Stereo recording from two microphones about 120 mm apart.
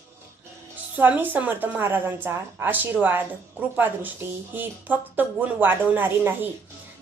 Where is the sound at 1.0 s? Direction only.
15° right (ahead or behind).